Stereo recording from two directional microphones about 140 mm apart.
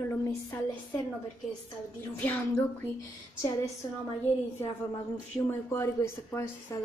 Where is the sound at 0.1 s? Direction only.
20° left (ahead or behind).